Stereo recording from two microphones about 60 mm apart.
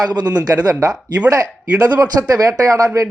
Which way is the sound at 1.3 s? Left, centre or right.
Right.